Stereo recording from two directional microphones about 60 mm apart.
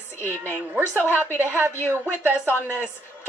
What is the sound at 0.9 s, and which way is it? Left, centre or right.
Speech, left.